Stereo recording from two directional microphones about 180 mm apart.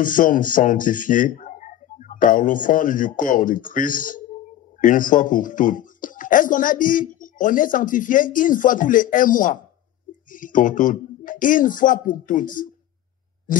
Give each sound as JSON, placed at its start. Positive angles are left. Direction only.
{"t": 0.0, "sound": "speech", "side_deg": 50}